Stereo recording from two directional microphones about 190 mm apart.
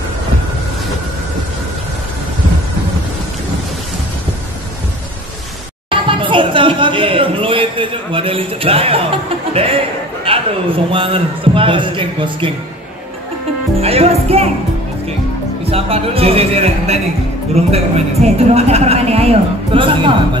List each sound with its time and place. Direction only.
5.9 s a sound: 25° right (ahead or behind)
13.7 s speech: 30° right (ahead or behind)
15.7 s speech: 30° right (ahead or behind)